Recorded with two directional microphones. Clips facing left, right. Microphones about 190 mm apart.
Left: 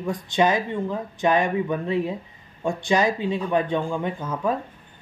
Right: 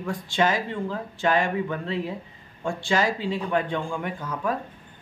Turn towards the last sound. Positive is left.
turn(degrees=20)  # may be behind; listen again after turning